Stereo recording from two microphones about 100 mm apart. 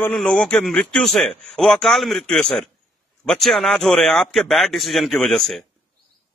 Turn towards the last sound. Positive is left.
turn(degrees=5)  # may be behind; listen again after turning